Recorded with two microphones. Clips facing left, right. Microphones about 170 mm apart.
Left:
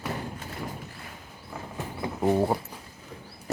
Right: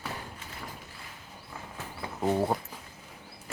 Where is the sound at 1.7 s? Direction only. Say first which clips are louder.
Left 7 dB; 15° left (ahead or behind).